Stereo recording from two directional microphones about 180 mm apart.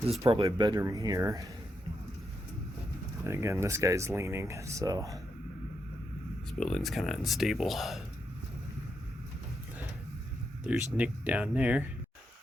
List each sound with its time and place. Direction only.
0.3 s speech: 30° right (ahead or behind)
3.2 s speech: 15° right (ahead or behind)
6.7 s speech: centre (ahead or behind)
10.6 s speech: 5° right (ahead or behind)